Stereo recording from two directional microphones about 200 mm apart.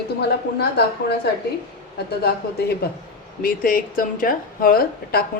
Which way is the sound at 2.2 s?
50° left (ahead or behind).